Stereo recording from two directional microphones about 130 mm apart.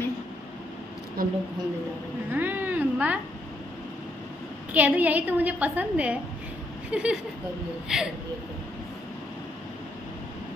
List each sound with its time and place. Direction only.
1.2 s speech: 90° right
2.3 s a sound: 15° right (ahead or behind)
4.7 s a woman's voice: 10° right (ahead or behind)